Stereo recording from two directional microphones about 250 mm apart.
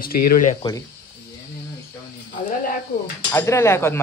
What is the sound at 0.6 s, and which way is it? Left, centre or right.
Sizzle, centre.